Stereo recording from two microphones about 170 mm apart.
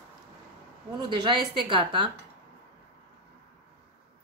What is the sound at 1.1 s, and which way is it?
A woman's voice, 30° right (ahead or behind).